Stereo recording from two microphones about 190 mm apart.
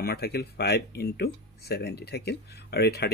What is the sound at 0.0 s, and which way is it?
Speech, 55° left (ahead or behind).